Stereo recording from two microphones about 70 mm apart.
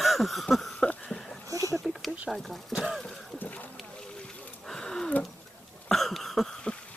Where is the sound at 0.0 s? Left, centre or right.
Centre.